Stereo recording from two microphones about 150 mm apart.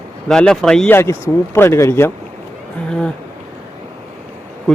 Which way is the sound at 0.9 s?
15° left (ahead or behind).